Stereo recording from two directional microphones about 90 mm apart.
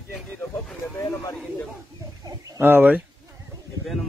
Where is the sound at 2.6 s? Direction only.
20° right (ahead or behind).